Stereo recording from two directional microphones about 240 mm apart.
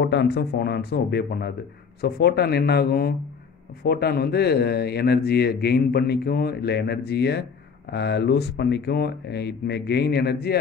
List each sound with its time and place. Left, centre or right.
0.0 s a man's voice: left